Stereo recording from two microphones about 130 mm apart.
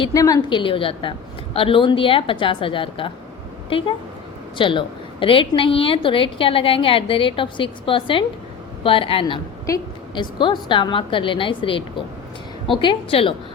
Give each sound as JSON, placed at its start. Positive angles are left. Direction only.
{"t": 0.1, "sound": "a woman's voice", "side_deg": 25}
{"t": 0.5, "sound": "a woman's voice", "side_deg": 40}
{"t": 12.8, "sound": "a woman's voice", "side_deg": 40}